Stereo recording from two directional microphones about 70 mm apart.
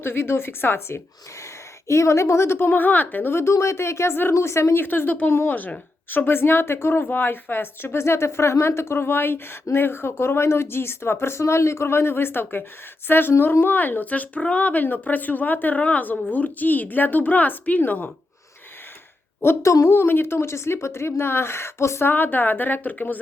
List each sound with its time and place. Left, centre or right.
0.0 s speech: left
19.4 s speech: left
22.1 s speech: left